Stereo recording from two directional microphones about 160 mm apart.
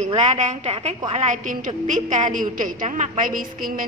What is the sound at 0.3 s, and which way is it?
A woman's voice, 45° right (ahead or behind).